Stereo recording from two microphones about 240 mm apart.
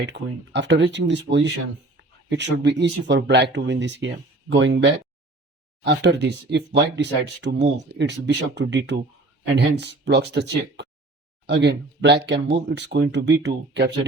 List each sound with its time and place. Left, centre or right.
0.0 s speech: right
2.0 s a sound: right
2.8 s speech: right